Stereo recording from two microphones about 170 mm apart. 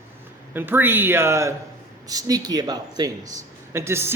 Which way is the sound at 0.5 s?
10° right (ahead or behind).